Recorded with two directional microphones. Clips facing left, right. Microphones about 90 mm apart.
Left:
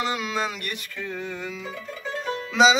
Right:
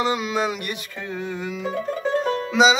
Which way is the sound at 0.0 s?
15° right (ahead or behind).